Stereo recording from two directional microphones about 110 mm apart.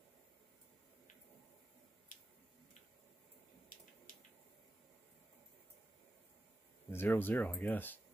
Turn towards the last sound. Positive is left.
turn(degrees=15)  # may be behind; listen again after turning